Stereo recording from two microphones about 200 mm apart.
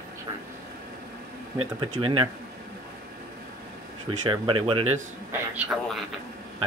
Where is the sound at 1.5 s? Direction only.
25° right (ahead or behind).